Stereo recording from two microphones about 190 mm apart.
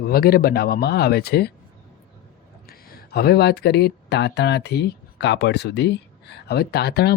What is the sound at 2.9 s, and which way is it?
Speech, 55° left (ahead or behind).